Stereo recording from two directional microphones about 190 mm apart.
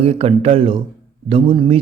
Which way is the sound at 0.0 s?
30° right (ahead or behind).